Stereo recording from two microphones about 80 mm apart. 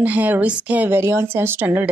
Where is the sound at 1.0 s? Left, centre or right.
Right.